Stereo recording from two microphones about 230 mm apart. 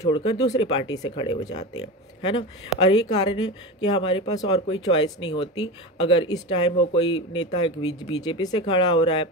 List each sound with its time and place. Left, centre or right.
0.0 s speech: left